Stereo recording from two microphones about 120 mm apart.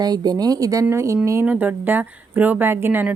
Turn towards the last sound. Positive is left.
turn(degrees=-15)  # may be behind; listen again after turning